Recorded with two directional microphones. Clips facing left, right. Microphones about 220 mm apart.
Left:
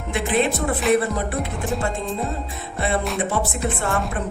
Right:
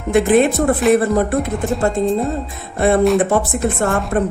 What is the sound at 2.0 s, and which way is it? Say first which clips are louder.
Music: right 11 dB; 40° right (ahead or behind).